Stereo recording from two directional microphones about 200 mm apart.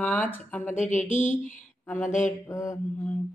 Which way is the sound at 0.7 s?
35° left (ahead or behind).